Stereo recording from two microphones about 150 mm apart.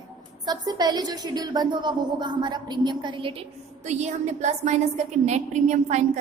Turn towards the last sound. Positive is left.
turn(degrees=-50)  # may be behind; listen again after turning